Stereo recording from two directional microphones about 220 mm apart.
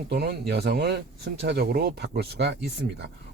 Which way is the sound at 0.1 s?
50° right (ahead or behind).